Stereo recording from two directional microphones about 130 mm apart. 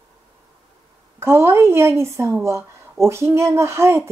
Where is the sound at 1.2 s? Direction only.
20° right (ahead or behind).